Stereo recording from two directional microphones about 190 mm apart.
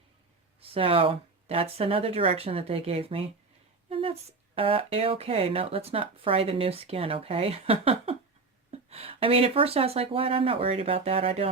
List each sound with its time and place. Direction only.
0.6 s speech: 30° right (ahead or behind)